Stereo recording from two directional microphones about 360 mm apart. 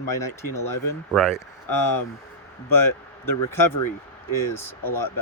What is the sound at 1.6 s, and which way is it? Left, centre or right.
A man's voice, left.